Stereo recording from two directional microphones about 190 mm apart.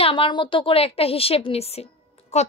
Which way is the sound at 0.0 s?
25° left (ahead or behind).